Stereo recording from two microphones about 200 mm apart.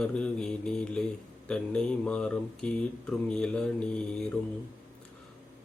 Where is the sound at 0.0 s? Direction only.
5° left (ahead or behind).